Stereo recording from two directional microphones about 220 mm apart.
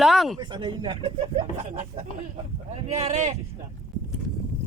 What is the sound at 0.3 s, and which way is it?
Speech, 20° right (ahead or behind).